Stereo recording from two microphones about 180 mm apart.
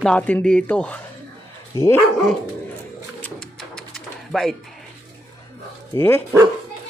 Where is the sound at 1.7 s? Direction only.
20° left (ahead or behind).